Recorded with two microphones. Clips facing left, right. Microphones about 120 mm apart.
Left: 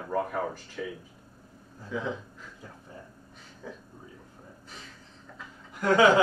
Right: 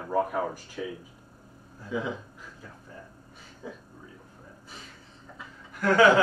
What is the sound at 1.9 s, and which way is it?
Chuckle, 5° right (ahead or behind).